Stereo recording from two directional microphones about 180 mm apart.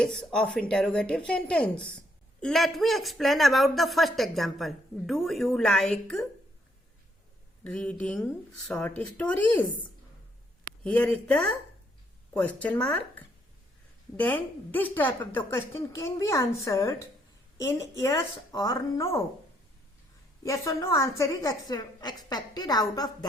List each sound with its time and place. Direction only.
0.0 s speech: 5° left (ahead or behind)
7.6 s a woman's voice: 5° left (ahead or behind)
10.8 s a woman's voice: 10° left (ahead or behind)
20.4 s a woman's voice: 15° left (ahead or behind)